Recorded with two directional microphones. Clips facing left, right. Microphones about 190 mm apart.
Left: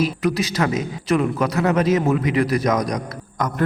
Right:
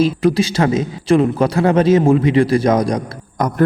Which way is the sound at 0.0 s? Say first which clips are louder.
Right 6 dB; 30° right (ahead or behind).